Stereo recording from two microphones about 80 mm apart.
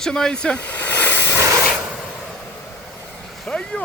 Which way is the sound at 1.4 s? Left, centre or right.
Right.